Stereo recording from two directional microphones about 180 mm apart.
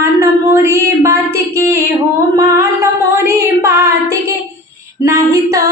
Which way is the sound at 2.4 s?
15° right (ahead or behind).